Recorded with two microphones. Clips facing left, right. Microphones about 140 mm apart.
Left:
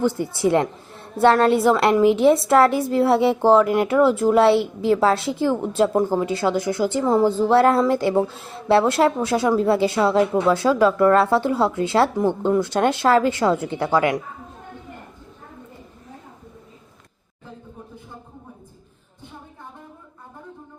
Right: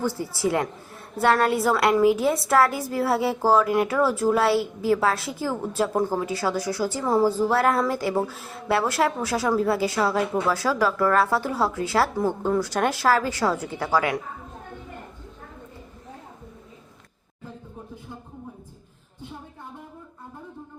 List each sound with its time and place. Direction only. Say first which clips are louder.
0.0 s a woman's voice: left 5 dB; 20° left (ahead or behind)